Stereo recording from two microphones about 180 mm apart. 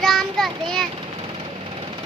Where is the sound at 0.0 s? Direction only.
Centre (ahead or behind).